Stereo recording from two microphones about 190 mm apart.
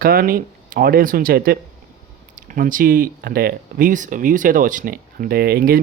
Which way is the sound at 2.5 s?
45° right (ahead or behind).